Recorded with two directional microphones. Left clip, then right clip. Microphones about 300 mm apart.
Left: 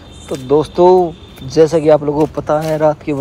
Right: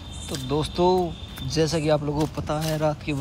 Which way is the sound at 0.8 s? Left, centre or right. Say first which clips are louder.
Left 11 dB; left.